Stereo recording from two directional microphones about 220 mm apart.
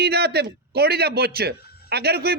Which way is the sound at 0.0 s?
45° right (ahead or behind).